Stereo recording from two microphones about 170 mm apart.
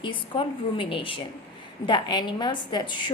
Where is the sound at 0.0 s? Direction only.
30° left (ahead or behind).